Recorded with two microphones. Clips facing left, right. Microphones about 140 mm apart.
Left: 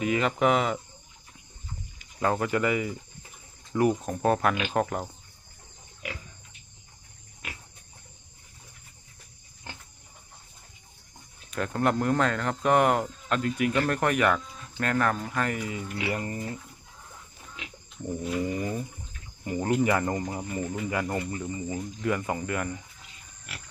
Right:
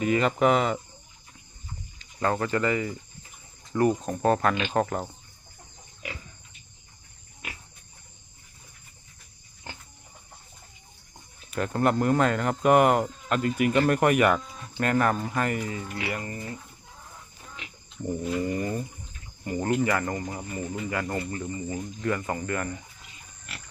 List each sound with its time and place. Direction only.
0.0 s speech: centre (ahead or behind)
2.0 s speech: 10° left (ahead or behind)
11.5 s speech: 5° right (ahead or behind)
15.6 s speech: 15° left (ahead or behind)
18.0 s speech: centre (ahead or behind)
20.6 s speech: centre (ahead or behind)
20.9 s speech: 15° left (ahead or behind)